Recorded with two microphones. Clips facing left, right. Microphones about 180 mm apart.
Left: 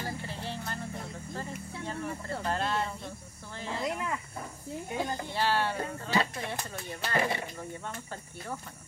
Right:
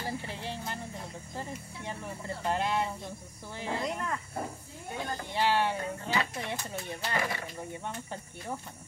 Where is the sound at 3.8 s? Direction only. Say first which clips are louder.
Left 1 dB; 5° left (ahead or behind).